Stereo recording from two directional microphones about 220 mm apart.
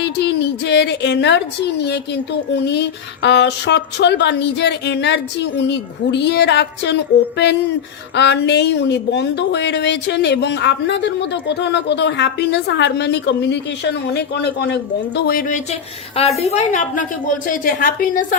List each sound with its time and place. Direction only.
0.0 s a woman's voice: 50° left (ahead or behind)
8.1 s speech: 50° left (ahead or behind)
16.2 s a woman's voice: 25° left (ahead or behind)